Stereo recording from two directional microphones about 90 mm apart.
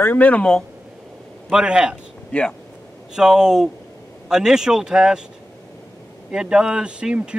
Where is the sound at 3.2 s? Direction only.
5° right (ahead or behind).